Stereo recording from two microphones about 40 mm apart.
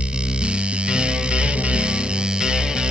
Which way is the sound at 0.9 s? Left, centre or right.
Right.